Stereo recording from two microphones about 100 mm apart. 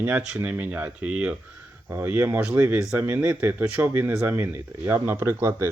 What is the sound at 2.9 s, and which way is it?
Speech, 20° right (ahead or behind).